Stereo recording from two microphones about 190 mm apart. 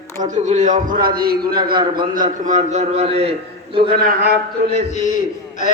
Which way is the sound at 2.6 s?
35° right (ahead or behind).